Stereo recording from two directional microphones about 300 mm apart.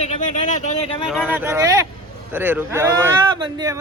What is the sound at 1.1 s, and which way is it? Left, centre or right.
Speech, centre.